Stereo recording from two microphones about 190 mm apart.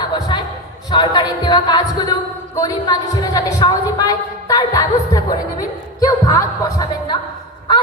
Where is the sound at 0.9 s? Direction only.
20° left (ahead or behind).